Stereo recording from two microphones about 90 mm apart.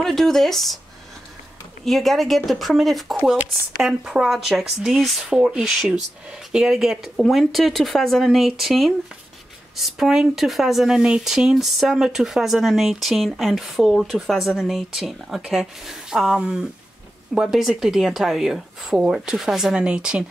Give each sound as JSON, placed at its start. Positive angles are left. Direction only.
{"t": 0.0, "sound": "speech", "side_deg": 5}
{"t": 1.9, "sound": "speech", "side_deg": 0}